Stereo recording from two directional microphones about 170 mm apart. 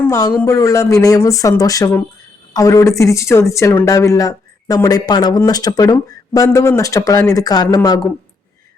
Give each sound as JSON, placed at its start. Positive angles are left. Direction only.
{"t": 0.0, "sound": "speech", "side_deg": 20}